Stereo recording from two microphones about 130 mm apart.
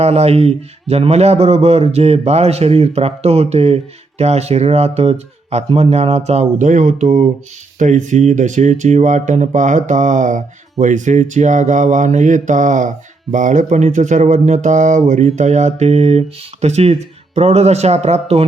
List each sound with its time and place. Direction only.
0.0 s speech: 55° right (ahead or behind)